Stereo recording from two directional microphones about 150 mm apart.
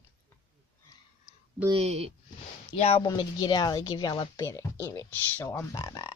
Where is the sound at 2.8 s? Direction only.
40° left (ahead or behind).